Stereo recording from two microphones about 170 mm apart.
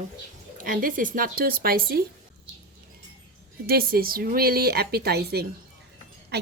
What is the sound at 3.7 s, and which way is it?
A woman's voice, 60° right (ahead or behind).